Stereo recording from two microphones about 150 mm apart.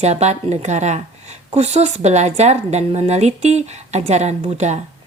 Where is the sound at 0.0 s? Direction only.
50° right (ahead or behind).